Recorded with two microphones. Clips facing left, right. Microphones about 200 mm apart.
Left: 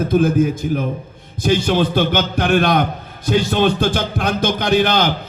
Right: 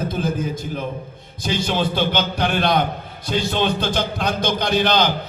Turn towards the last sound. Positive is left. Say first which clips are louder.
# left 3 dB
turn(degrees=50)  # may be behind; listen again after turning